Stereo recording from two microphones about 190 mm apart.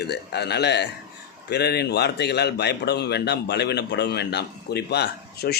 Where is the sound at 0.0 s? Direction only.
60° left (ahead or behind).